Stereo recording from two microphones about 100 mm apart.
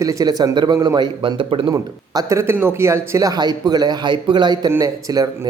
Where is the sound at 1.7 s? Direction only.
40° right (ahead or behind).